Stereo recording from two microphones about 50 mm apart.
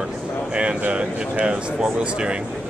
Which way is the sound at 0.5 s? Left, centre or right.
Right.